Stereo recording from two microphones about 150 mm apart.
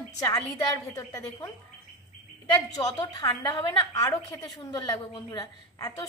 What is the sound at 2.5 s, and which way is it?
A woman's voice, 25° left (ahead or behind).